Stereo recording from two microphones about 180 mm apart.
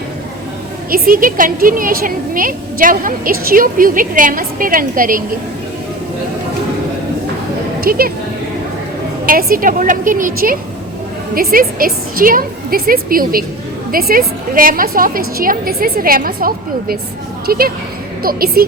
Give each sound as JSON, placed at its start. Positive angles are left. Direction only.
{"t": 0.9, "sound": "a woman's voice", "side_deg": -55}
{"t": 7.8, "sound": "speech", "side_deg": -55}
{"t": 9.2, "sound": "a woman's voice", "side_deg": -50}